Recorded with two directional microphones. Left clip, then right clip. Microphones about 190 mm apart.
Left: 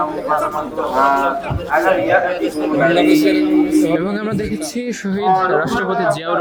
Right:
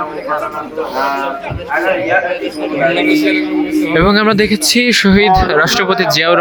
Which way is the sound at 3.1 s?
65° left (ahead or behind).